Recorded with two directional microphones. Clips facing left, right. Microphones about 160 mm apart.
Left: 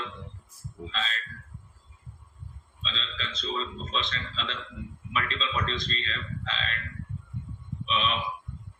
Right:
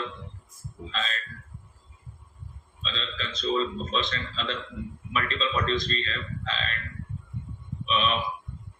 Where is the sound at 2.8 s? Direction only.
50° right (ahead or behind).